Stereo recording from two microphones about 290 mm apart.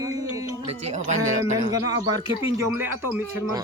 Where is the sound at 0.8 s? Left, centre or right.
Right.